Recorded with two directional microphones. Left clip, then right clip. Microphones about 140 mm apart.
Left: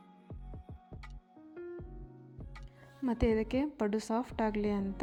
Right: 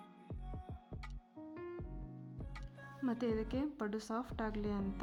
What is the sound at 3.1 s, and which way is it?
A woman's voice, 30° left (ahead or behind).